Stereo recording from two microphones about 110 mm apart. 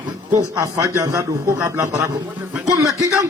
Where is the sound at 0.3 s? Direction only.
30° right (ahead or behind).